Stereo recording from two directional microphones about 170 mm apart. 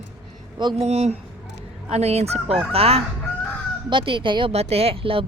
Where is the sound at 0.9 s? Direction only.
40° right (ahead or behind).